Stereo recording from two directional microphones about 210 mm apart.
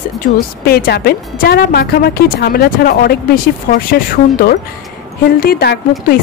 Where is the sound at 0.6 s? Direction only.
45° left (ahead or behind).